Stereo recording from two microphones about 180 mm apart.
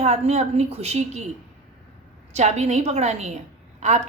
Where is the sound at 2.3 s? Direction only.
40° right (ahead or behind).